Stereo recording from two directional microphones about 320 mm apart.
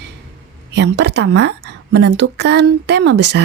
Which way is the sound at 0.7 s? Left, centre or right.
Right.